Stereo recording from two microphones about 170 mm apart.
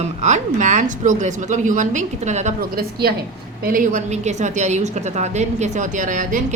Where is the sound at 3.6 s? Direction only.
50° right (ahead or behind).